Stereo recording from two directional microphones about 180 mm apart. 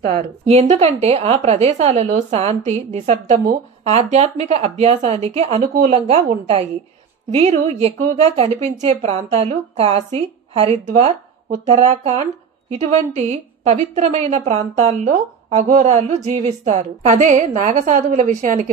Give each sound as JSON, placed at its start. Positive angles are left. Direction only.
{"t": 0.0, "sound": "a woman's voice", "side_deg": -50}
{"t": 0.5, "sound": "a woman's voice", "side_deg": -35}